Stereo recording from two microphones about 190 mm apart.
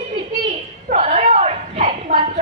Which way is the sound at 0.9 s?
35° right (ahead or behind).